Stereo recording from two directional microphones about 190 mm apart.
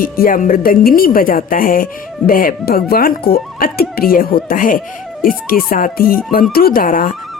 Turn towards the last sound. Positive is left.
turn(degrees=45)  # may be behind; listen again after turning